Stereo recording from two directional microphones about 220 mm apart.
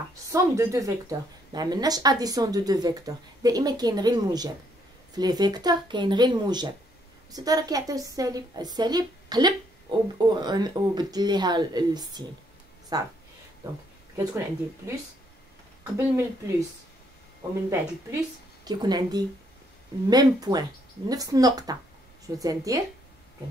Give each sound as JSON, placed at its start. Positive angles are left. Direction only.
{"t": 0.1, "sound": "a woman's voice", "side_deg": -15}
{"t": 14.8, "sound": "a woman's voice", "side_deg": -15}
{"t": 16.2, "sound": "a woman's voice", "side_deg": -15}
{"t": 17.6, "sound": "a woman's voice", "side_deg": -15}